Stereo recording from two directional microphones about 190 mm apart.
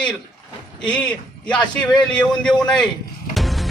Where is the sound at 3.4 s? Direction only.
Centre (ahead or behind).